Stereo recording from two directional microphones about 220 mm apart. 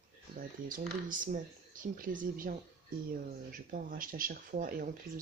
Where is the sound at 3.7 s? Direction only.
40° right (ahead or behind).